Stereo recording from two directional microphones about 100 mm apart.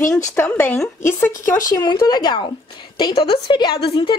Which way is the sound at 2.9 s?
55° left (ahead or behind).